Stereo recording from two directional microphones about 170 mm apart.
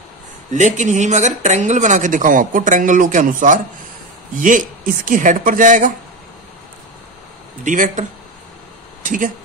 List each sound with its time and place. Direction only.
0.5 s speech: 45° right (ahead or behind)
7.6 s speech: 50° right (ahead or behind)